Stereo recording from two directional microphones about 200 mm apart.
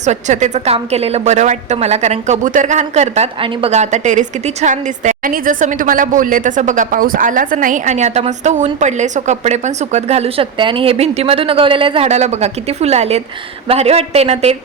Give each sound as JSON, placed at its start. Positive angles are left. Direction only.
{"t": 0.0, "sound": "a woman's voice", "side_deg": -35}